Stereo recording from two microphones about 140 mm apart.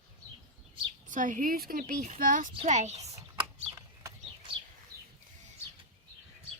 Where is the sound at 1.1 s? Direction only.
70° right (ahead or behind); by 2.1 s 90° right.